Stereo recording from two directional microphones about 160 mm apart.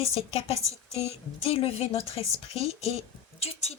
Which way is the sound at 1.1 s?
40° left (ahead or behind).